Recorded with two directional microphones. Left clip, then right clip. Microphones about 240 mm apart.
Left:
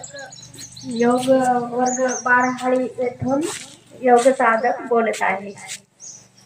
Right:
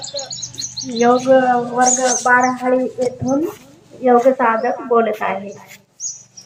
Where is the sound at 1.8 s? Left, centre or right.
Right.